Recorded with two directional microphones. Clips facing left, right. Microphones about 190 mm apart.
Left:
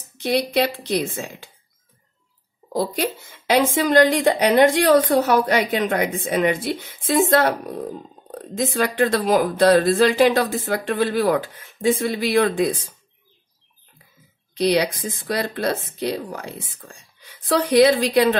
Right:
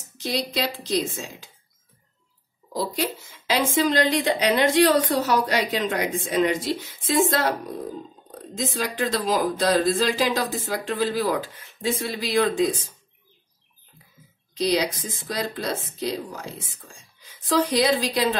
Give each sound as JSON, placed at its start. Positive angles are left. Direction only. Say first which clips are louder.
{"t": 0.2, "sound": "a woman's voice", "louder": "left 7 dB", "side_deg": 60}
{"t": 2.7, "sound": "a woman's voice", "louder": "left 4 dB", "side_deg": 55}
{"t": 14.5, "sound": "a woman's voice", "louder": "left 4 dB", "side_deg": 60}